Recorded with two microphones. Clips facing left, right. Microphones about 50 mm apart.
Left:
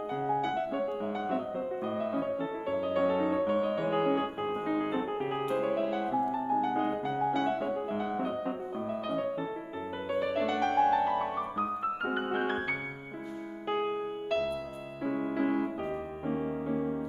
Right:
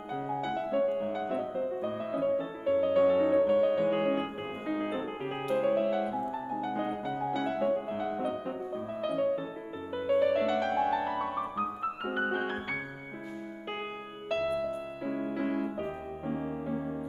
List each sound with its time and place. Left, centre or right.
0.1 s music: centre
4.1 s piano: centre
5.6 s music: centre
15.0 s music: centre